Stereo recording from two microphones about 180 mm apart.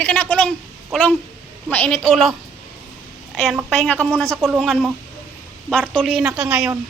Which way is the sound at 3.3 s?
5° left (ahead or behind).